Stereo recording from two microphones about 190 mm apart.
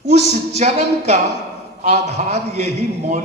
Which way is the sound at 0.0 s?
35° right (ahead or behind).